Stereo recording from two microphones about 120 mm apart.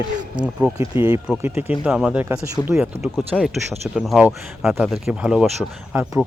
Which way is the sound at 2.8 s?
Centre (ahead or behind).